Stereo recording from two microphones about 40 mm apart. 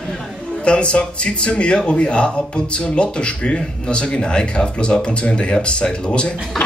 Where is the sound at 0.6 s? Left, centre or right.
Left.